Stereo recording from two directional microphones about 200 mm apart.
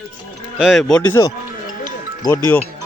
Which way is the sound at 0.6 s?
Centre (ahead or behind).